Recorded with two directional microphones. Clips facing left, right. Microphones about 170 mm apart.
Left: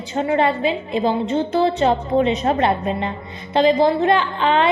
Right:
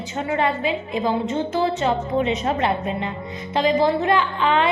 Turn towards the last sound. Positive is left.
turn(degrees=35)  # may be behind; listen again after turning